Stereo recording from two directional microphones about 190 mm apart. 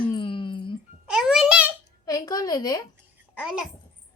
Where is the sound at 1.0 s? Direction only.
5° right (ahead or behind).